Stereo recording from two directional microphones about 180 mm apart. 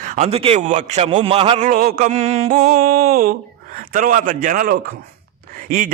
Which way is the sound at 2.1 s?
40° right (ahead or behind).